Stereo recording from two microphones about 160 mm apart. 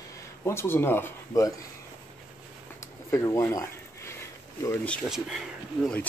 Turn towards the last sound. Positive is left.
turn(degrees=5)  # may be behind; listen again after turning